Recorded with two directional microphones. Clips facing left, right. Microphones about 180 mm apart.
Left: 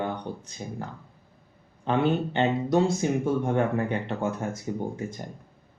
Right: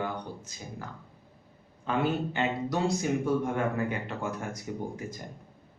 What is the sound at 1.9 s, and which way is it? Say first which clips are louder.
Speech: left 4 dB; 30° left (ahead or behind).